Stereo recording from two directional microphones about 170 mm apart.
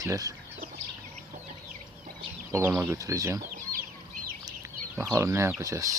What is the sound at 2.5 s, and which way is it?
Speech, 15° right (ahead or behind).